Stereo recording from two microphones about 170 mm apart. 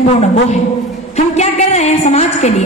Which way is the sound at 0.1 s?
40° left (ahead or behind).